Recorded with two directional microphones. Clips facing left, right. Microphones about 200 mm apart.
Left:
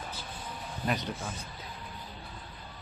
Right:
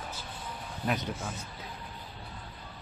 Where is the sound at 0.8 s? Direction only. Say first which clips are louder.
Right 1 dB; 5° right (ahead or behind).